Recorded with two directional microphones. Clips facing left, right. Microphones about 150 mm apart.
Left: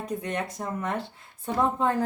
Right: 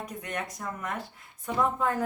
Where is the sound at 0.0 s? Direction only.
30° left (ahead or behind).